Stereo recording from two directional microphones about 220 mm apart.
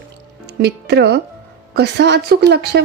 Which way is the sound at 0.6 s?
50° right (ahead or behind).